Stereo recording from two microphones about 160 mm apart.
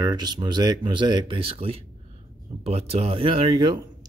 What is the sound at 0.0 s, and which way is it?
Speech, 25° right (ahead or behind).